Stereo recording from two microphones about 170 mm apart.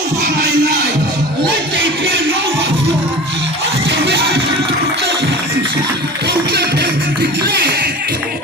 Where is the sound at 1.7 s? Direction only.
90° right.